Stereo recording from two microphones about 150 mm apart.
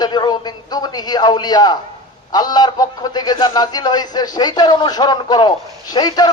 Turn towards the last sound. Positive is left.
turn(degrees=25)  # may be behind; listen again after turning